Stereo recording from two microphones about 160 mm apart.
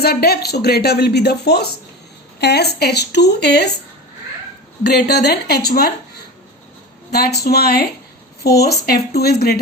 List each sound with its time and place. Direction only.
0.0 s speech: 75° left (ahead or behind); by 3.7 s 90° left
4.8 s speech: 90° left
7.1 s speech: 85° left